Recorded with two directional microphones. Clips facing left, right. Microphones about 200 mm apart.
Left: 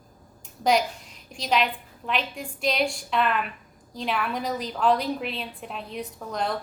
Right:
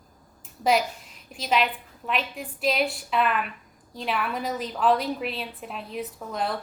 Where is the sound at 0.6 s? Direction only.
Centre (ahead or behind).